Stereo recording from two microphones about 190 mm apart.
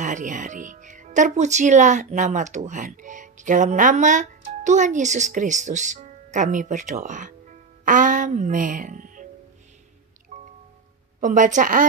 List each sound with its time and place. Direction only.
0.0 s speech: 40° right (ahead or behind)
10.3 s music: 40° right (ahead or behind)
11.1 s a woman's voice: 40° right (ahead or behind)